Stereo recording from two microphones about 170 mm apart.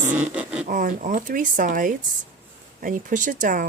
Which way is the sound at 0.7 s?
55° right (ahead or behind).